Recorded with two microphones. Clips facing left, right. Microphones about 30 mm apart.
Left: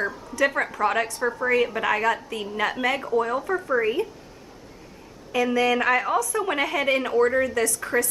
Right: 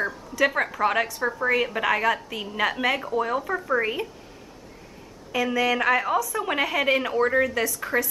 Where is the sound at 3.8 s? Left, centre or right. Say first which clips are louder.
Left 4 dB; centre.